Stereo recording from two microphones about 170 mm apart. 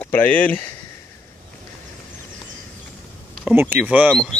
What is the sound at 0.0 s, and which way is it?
Speech, 10° left (ahead or behind).